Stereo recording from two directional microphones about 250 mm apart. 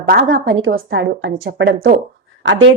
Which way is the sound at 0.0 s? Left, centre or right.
Right.